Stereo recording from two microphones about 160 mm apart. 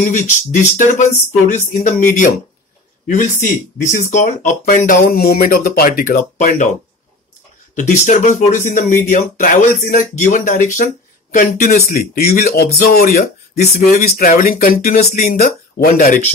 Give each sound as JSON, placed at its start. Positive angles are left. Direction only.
{"t": 0.0, "sound": "speech", "side_deg": 50}
{"t": 3.1, "sound": "speech", "side_deg": 50}
{"t": 7.7, "sound": "speech", "side_deg": 50}
{"t": 11.9, "sound": "speech", "side_deg": 65}